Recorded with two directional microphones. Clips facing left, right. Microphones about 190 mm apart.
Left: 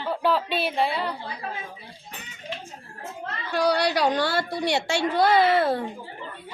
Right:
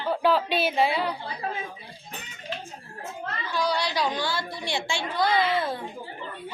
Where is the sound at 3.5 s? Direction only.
65° left (ahead or behind).